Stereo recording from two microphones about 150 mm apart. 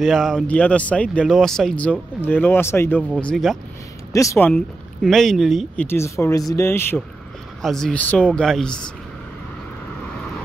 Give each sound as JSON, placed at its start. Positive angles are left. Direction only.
{"t": 0.0, "sound": "speech", "side_deg": 0}
{"t": 3.2, "sound": "speech", "side_deg": 5}
{"t": 4.1, "sound": "speech", "side_deg": 20}
{"t": 4.5, "sound": "speech", "side_deg": 5}
{"t": 5.9, "sound": "speech", "side_deg": 20}
{"t": 7.6, "sound": "speech", "side_deg": 5}